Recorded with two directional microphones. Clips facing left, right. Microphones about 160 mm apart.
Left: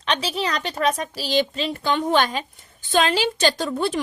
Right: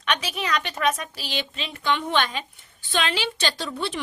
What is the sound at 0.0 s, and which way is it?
A woman's voice, 30° left (ahead or behind).